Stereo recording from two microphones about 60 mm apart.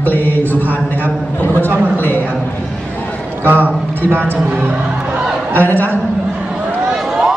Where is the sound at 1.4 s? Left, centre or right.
Left.